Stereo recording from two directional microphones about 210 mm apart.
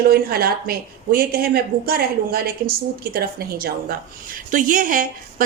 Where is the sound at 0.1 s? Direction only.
45° right (ahead or behind).